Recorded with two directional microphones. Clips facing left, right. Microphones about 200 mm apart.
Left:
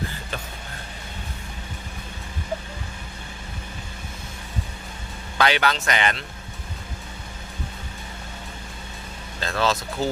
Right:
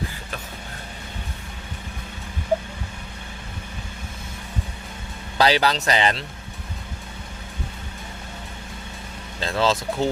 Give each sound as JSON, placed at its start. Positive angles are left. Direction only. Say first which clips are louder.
{"t": 5.4, "sound": "speech", "louder": "right 2 dB", "side_deg": -35}
{"t": 9.4, "sound": "speech", "louder": "right 2 dB", "side_deg": -25}